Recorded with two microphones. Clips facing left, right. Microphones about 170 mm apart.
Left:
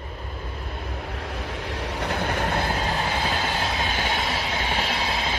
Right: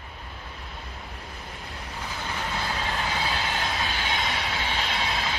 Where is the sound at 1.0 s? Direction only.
80° left; by 2.7 s 55° left (ahead or behind).